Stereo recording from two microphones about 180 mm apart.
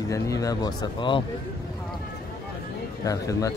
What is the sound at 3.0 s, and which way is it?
Speech, 20° left (ahead or behind).